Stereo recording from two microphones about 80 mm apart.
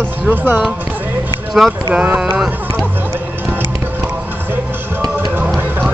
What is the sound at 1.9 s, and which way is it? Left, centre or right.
Speech, centre.